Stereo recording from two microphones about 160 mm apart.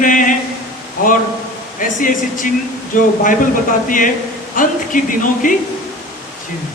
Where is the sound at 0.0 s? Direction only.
55° left (ahead or behind).